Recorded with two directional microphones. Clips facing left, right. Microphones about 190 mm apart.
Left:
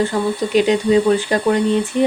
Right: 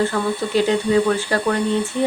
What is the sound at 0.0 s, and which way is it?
Speech, 20° left (ahead or behind).